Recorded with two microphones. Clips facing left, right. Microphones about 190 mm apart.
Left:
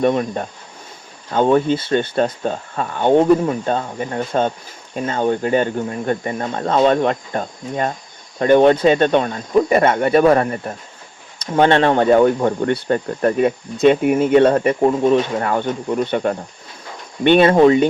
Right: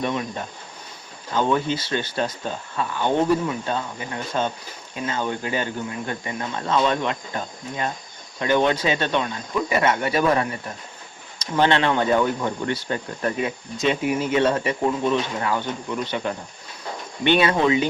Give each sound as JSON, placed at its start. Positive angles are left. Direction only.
{"t": 0.0, "sound": "speech", "side_deg": 50}